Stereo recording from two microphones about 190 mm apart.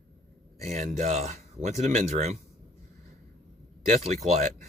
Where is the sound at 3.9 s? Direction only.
35° right (ahead or behind).